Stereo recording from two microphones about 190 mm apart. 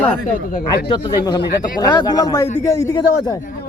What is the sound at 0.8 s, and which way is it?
A man's voice, 25° left (ahead or behind).